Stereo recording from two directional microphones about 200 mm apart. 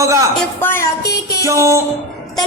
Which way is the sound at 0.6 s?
10° left (ahead or behind).